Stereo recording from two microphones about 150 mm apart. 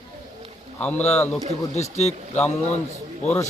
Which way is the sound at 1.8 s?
45° left (ahead or behind).